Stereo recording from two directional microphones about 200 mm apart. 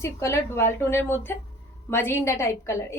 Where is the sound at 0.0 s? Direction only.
15° left (ahead or behind).